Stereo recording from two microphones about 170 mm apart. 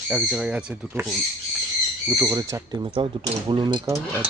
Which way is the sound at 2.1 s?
15° right (ahead or behind).